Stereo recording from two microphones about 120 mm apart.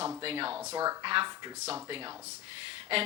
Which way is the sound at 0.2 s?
50° right (ahead or behind).